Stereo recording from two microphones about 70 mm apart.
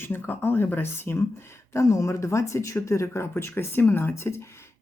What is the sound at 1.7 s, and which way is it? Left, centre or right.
Speech, left.